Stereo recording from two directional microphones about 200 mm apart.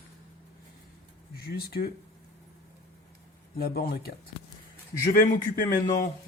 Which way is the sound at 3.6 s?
50° left (ahead or behind).